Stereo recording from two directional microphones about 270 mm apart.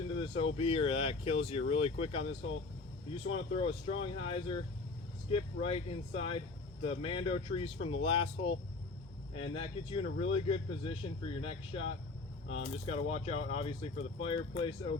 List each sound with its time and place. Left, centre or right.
0.2 s speech: left
12.5 s speech: left
12.8 s speech: left